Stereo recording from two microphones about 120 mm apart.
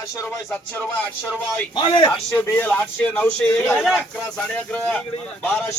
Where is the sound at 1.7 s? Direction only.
40° left (ahead or behind).